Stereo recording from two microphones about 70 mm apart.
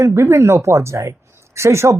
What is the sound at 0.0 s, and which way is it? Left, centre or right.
Speech, right.